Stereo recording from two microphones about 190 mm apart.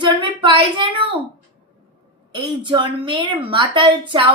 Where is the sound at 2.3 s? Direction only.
25° right (ahead or behind).